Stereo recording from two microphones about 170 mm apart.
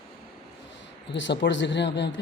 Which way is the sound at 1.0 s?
90° left.